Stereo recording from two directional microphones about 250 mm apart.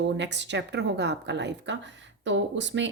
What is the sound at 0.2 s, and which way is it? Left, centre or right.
Speech, right.